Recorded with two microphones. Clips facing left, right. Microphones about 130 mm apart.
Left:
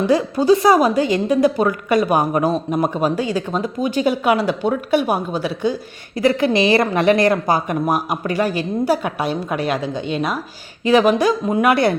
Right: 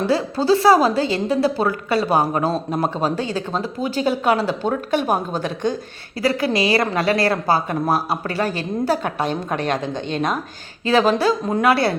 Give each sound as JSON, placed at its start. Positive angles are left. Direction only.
{"t": 0.1, "sound": "a woman's voice", "side_deg": 15}
{"t": 6.1, "sound": "a woman's voice", "side_deg": 20}